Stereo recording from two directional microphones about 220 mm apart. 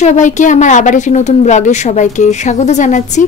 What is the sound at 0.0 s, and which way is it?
A woman's voice, 35° left (ahead or behind).